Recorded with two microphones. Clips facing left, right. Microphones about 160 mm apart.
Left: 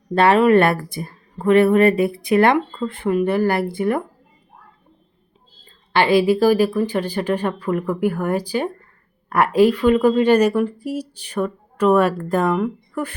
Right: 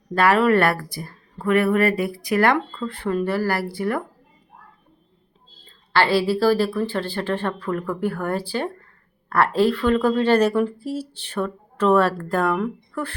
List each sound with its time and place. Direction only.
0.1 s speech: 25° left (ahead or behind)
5.9 s speech: 15° left (ahead or behind)